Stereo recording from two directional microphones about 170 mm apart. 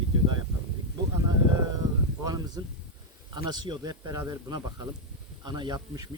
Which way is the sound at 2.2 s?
25° right (ahead or behind).